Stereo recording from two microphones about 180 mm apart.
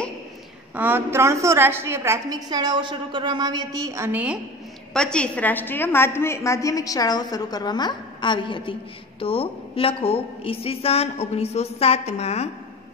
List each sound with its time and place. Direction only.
0.7 s a woman's voice: 10° right (ahead or behind)
4.9 s a woman's voice: 5° left (ahead or behind); by 12.4 s 35° left (ahead or behind)